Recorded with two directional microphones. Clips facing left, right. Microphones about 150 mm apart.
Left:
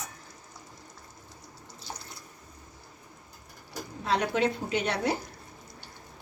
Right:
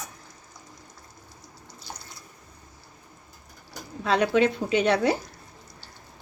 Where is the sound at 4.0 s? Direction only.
90° right.